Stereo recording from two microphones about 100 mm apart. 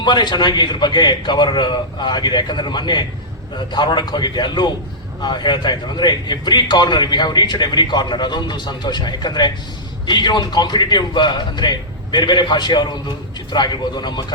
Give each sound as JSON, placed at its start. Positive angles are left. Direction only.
{"t": 0.0, "sound": "a man's voice", "side_deg": 45}